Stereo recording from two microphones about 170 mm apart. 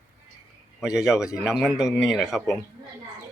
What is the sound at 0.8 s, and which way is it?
Speech, 5° right (ahead or behind).